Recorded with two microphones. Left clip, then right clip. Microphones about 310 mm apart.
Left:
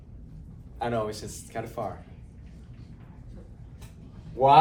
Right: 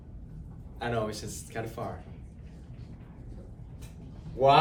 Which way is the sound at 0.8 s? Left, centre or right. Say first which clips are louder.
Left 3 dB; centre.